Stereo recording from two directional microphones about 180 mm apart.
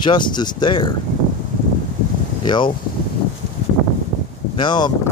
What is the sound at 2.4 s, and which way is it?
Speech, 25° left (ahead or behind).